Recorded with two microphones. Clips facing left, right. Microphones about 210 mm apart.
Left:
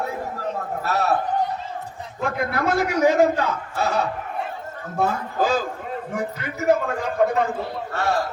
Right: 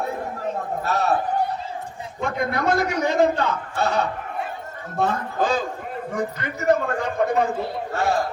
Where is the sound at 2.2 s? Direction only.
5° left (ahead or behind).